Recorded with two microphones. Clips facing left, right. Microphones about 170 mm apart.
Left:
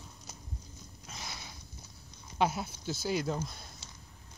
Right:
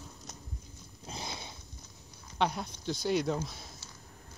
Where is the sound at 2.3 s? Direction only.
5° left (ahead or behind).